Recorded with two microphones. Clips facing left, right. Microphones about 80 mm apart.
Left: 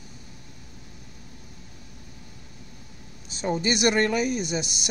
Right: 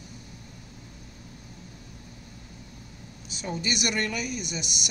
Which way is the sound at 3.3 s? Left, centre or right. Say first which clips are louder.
Left 6 dB; left.